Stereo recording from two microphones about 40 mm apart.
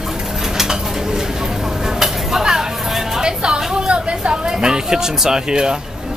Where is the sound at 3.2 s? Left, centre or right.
Right.